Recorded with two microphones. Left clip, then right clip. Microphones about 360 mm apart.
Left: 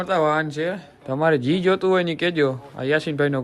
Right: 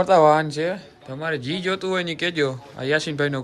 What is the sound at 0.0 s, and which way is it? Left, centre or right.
Speech, centre.